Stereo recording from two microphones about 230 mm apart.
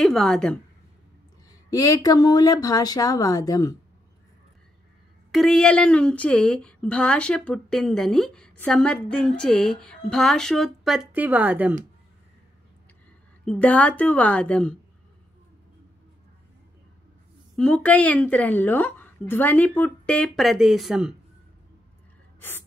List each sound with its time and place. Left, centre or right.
0.0 s a woman's voice: centre
1.7 s a woman's voice: centre
5.3 s a woman's voice: centre
13.5 s a woman's voice: centre
17.6 s a woman's voice: centre